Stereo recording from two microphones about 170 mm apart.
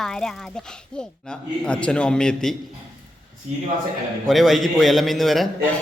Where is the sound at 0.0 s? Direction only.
5° left (ahead or behind).